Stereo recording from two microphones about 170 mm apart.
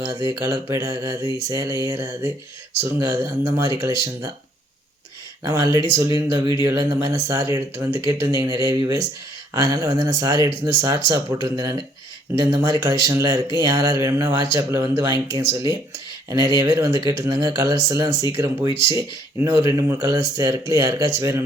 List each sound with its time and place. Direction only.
0.3 s speech: 20° right (ahead or behind)
5.4 s speech: 20° right (ahead or behind)